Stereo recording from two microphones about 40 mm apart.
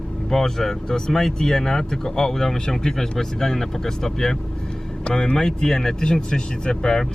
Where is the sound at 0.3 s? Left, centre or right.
Centre.